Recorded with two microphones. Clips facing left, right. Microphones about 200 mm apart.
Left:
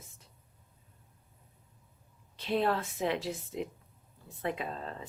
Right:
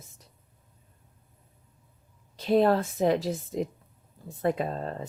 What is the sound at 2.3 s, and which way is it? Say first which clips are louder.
Speech: right 8 dB; 40° right (ahead or behind).